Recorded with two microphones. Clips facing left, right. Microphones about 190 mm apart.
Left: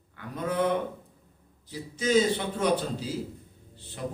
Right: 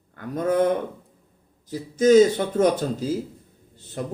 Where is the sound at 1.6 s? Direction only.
45° right (ahead or behind).